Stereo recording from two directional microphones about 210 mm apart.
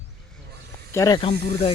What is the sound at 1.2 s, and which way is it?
Speech, 25° left (ahead or behind).